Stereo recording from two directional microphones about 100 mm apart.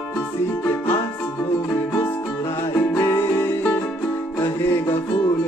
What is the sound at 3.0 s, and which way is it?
Music, 25° left (ahead or behind).